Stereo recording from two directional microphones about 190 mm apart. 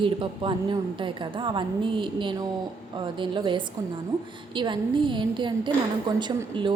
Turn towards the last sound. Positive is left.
turn(degrees=-25)  # may be behind; listen again after turning